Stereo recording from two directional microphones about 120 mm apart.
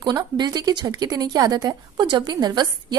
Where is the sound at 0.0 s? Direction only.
35° right (ahead or behind).